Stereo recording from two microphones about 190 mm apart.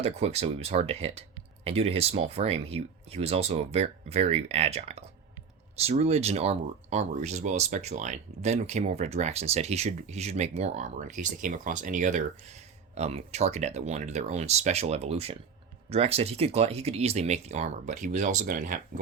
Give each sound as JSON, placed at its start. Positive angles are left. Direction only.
{"t": 0.0, "sound": "speech", "side_deg": -35}